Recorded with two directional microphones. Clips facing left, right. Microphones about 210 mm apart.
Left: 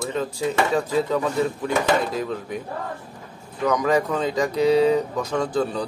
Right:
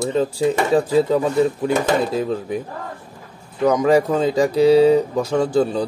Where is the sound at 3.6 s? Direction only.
30° right (ahead or behind).